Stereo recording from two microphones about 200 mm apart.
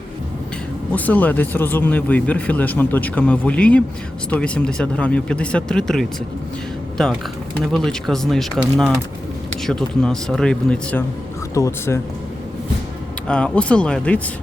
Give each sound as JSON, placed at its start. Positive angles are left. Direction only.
{"t": 0.9, "sound": "speech", "side_deg": 10}
{"t": 11.5, "sound": "speech", "side_deg": 15}
{"t": 13.2, "sound": "speech", "side_deg": 5}